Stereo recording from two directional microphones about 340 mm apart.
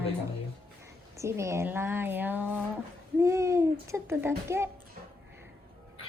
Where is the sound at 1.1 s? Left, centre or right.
Centre.